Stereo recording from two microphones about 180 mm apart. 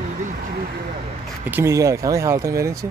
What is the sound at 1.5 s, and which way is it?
Speech, 15° right (ahead or behind).